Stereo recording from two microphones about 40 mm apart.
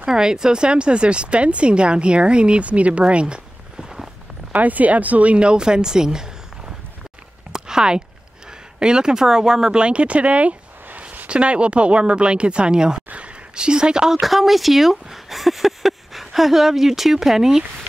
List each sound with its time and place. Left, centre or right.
0.0 s speech: centre
4.5 s speech: right
5.4 s speech: right
7.5 s a sound: centre
8.7 s speech: centre
9.8 s speech: right
14.2 s speech: centre